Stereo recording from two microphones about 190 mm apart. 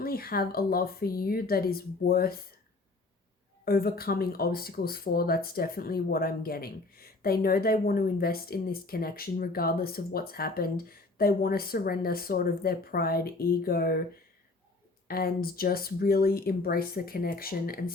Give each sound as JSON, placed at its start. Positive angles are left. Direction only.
{"t": 0.0, "sound": "speech", "side_deg": 50}
{"t": 3.7, "sound": "speech", "side_deg": 50}
{"t": 15.0, "sound": "speech", "side_deg": 50}